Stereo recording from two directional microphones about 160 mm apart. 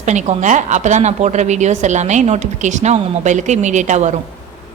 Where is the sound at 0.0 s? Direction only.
45° right (ahead or behind).